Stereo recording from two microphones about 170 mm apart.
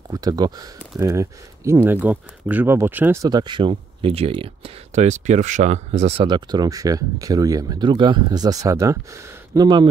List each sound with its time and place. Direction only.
0.1 s speech: 20° right (ahead or behind)